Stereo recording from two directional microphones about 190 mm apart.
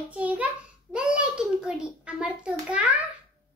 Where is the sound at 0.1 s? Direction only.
10° right (ahead or behind).